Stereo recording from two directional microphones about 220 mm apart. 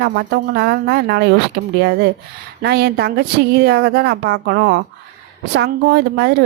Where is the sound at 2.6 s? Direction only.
50° right (ahead or behind).